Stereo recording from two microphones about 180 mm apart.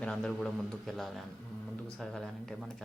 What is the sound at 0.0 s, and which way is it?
Speech, 5° left (ahead or behind).